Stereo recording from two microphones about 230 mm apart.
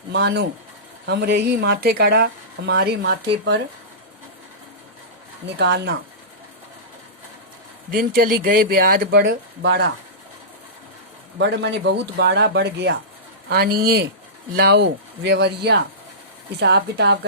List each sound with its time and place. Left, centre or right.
0.1 s speech: right
5.5 s speech: right
7.9 s speech: right
11.3 s speech: right